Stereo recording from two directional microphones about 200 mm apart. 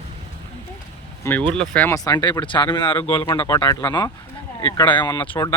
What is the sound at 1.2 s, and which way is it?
Speech, 10° left (ahead or behind).